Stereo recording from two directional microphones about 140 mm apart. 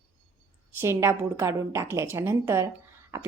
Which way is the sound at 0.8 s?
15° right (ahead or behind).